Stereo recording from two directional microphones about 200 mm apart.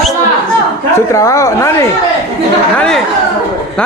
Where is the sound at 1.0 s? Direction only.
15° left (ahead or behind).